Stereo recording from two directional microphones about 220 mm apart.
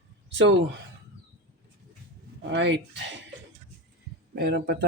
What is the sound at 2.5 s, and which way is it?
Speech, 50° right (ahead or behind).